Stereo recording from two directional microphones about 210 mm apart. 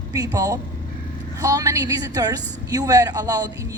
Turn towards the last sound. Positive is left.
turn(degrees=-15)  # may be behind; listen again after turning